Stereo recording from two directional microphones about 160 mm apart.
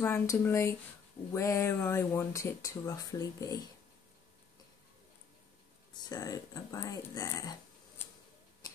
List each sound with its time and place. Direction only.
0.0 s speech: 15° left (ahead or behind)
5.9 s speech: 25° left (ahead or behind)